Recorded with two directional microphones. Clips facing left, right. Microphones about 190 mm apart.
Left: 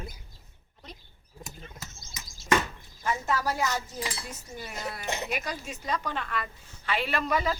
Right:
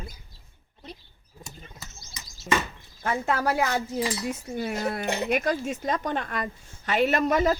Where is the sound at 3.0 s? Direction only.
55° right (ahead or behind).